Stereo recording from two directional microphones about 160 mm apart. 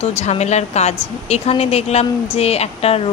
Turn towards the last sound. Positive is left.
turn(degrees=40)  # may be behind; listen again after turning